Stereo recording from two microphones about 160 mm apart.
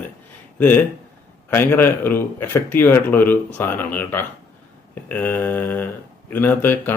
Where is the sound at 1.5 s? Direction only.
15° left (ahead or behind).